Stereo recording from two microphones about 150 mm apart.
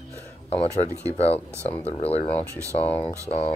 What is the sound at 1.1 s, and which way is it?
Speech, 45° left (ahead or behind).